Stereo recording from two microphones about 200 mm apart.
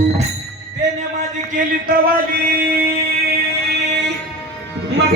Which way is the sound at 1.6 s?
40° right (ahead or behind).